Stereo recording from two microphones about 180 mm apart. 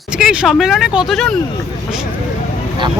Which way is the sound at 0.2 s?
5° right (ahead or behind).